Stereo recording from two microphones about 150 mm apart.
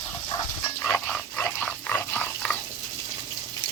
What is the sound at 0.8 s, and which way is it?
Dog, 10° left (ahead or behind).